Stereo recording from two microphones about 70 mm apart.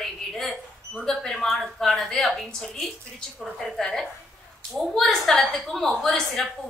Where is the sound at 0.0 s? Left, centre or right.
Centre.